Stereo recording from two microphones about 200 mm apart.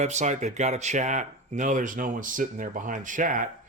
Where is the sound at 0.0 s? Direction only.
35° right (ahead or behind).